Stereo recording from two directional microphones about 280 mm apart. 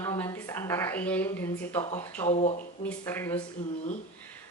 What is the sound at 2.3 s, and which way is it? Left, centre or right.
Speech, left.